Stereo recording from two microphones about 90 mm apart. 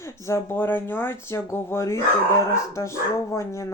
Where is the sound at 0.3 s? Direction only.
30° left (ahead or behind).